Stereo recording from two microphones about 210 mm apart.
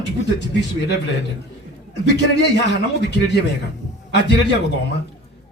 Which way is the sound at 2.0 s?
55° left (ahead or behind).